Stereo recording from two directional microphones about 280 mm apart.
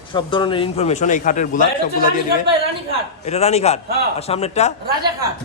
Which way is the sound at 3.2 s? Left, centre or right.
Left.